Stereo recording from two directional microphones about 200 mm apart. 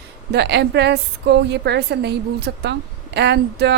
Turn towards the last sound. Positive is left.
turn(degrees=-55)  # may be behind; listen again after turning